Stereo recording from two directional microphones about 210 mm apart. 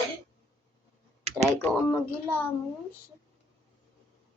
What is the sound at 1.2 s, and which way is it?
Computer keyboard, 30° right (ahead or behind).